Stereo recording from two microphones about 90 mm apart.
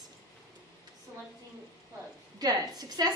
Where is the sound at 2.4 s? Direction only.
45° right (ahead or behind).